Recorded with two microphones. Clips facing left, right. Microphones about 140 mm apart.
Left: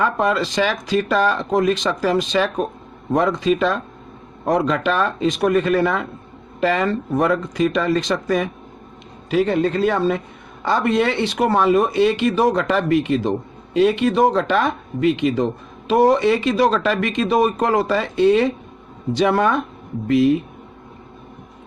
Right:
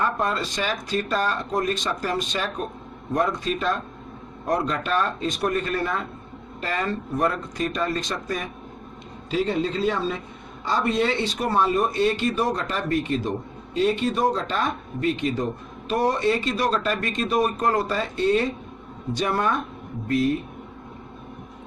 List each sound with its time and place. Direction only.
0.0 s speech: 90° left
9.3 s speech: 60° left (ahead or behind); by 13.3 s 90° left
13.7 s speech: 70° left (ahead or behind); by 20.4 s 90° left